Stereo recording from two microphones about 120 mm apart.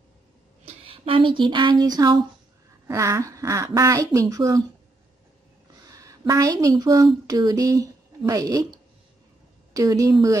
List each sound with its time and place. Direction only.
0.7 s speech: 50° right (ahead or behind); by 4.6 s 30° right (ahead or behind)
5.9 s a woman's voice: 30° right (ahead or behind)
9.8 s speech: 30° right (ahead or behind)